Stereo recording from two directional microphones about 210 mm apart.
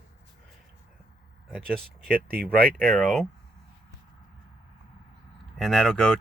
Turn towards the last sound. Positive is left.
turn(degrees=5)  # may be behind; listen again after turning